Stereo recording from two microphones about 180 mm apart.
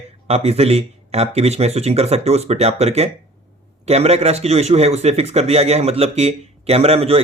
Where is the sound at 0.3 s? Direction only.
35° right (ahead or behind).